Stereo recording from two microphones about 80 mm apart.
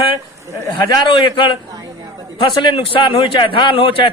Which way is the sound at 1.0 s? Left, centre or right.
Left.